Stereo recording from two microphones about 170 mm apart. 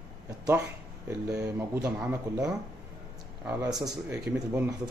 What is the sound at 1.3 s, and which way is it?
Speech, 20° right (ahead or behind).